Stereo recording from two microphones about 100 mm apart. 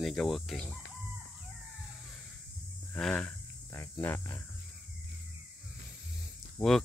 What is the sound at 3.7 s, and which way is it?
Speech, 25° left (ahead or behind).